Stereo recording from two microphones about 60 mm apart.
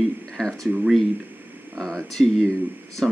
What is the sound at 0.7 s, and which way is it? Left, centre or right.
Speech, centre.